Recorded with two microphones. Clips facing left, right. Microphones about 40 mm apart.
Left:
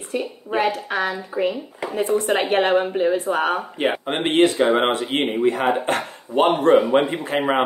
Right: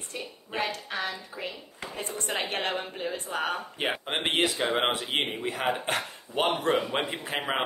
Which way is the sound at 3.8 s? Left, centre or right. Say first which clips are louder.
Left 6 dB; centre.